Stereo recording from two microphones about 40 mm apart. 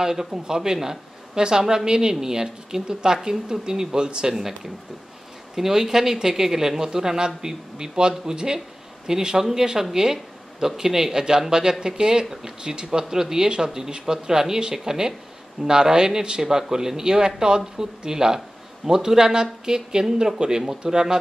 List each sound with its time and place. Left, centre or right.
0.0 s speech: centre
5.6 s speech: centre